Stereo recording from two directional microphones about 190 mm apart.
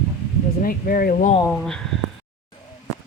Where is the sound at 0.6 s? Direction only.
50° left (ahead or behind).